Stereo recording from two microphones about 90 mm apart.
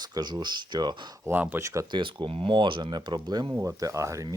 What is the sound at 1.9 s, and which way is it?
Speech, 65° right (ahead or behind).